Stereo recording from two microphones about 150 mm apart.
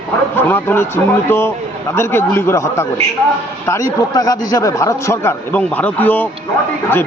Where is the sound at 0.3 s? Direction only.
15° left (ahead or behind).